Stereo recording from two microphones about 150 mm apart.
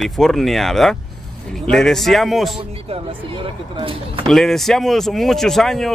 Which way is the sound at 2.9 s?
35° right (ahead or behind).